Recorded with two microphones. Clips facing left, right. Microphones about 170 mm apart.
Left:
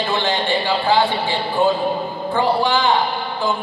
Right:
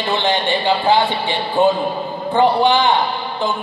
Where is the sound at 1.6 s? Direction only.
20° right (ahead or behind).